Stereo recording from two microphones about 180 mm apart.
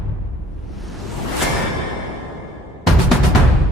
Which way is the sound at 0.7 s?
Centre (ahead or behind).